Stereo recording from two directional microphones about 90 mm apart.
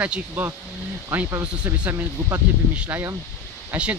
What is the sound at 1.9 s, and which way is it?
Speech, 30° right (ahead or behind).